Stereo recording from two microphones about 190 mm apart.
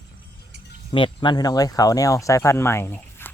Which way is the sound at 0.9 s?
25° left (ahead or behind).